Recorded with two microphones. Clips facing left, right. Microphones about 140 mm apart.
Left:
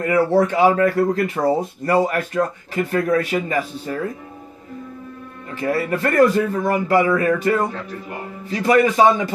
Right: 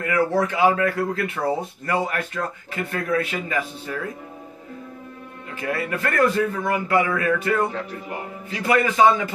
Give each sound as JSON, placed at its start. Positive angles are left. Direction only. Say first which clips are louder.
{"t": 0.0, "sound": "speech", "louder": "left 5 dB", "side_deg": 35}
{"t": 5.6, "sound": "speech", "louder": "left 5 dB", "side_deg": 35}